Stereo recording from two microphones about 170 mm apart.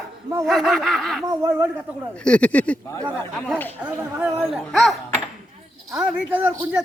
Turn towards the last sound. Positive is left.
turn(degrees=-10)  # may be behind; listen again after turning